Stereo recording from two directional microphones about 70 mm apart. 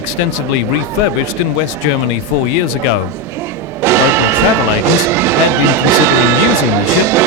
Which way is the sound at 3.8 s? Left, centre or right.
Right.